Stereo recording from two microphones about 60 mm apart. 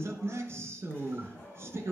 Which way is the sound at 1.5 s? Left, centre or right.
Right.